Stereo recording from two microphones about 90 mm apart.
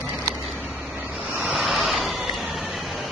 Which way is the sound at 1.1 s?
15° right (ahead or behind).